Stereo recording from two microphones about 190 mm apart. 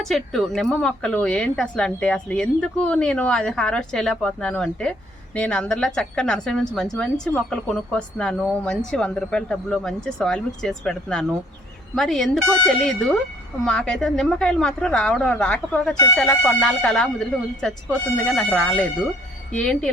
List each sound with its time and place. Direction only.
0.0 s speech: centre (ahead or behind)